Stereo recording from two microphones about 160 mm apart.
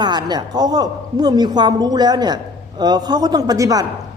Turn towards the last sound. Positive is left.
turn(degrees=-25)  # may be behind; listen again after turning